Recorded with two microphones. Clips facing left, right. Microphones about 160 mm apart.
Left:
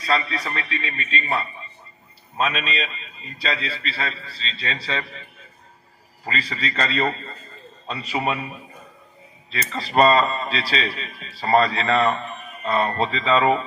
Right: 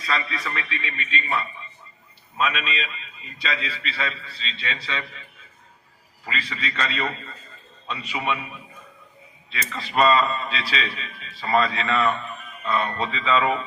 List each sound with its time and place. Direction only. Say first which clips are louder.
0.0 s a man's voice: left 4 dB; 35° left (ahead or behind)
6.2 s a man's voice: left 3 dB; 35° left (ahead or behind)